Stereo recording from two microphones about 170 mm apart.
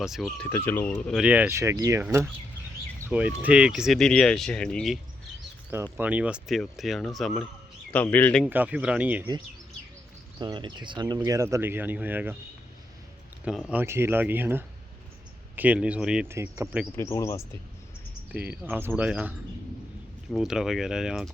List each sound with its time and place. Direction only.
0.0 s speech: centre (ahead or behind)
1.1 s speech: 5° right (ahead or behind)
3.1 s speech: 10° right (ahead or behind)
5.7 s speech: 10° right (ahead or behind); by 8.4 s 10° left (ahead or behind)
8.4 s speech: 10° right (ahead or behind)
10.4 s speech: 25° right (ahead or behind)
11.2 s speech: 15° right (ahead or behind)
13.4 s speech: 5° right (ahead or behind)
16.9 s speech: 15° left (ahead or behind)
18.3 s speech: 10° right (ahead or behind)
20.3 s speech: 5° right (ahead or behind)